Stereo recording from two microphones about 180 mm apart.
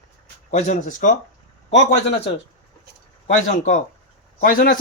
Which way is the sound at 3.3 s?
45° left (ahead or behind).